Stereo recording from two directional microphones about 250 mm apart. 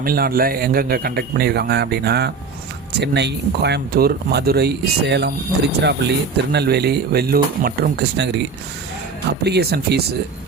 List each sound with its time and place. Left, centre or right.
0.0 s speech: right